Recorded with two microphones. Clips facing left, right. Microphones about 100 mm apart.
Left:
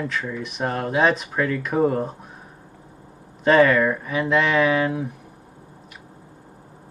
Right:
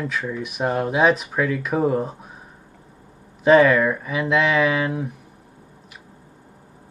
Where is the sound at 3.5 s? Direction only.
Centre (ahead or behind).